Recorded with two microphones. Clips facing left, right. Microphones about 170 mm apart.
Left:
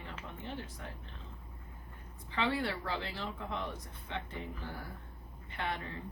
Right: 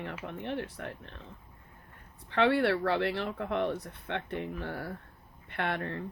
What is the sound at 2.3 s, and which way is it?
Speech, 65° right (ahead or behind).